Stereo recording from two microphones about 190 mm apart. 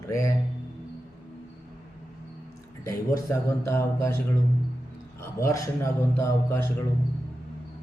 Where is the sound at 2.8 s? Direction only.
15° left (ahead or behind).